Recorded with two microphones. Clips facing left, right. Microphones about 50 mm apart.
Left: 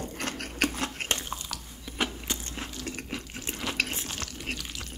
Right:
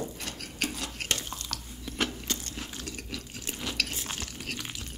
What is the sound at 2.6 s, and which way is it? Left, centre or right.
Biting, left.